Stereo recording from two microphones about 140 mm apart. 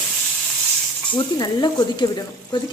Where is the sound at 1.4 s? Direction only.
30° left (ahead or behind).